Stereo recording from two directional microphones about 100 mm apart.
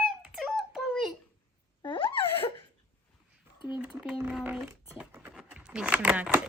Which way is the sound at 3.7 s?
10° right (ahead or behind).